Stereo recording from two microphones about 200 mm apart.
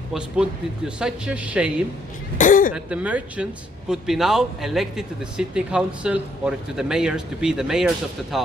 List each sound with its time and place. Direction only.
0.1 s a man's voice: 5° right (ahead or behind)
2.3 s speech: 40° left (ahead or behind)
2.7 s a man's voice: 5° right (ahead or behind)